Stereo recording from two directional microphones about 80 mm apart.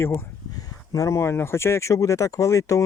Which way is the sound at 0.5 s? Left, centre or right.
Left.